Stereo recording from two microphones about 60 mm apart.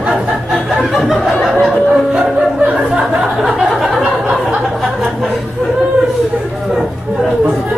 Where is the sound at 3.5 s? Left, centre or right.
Centre.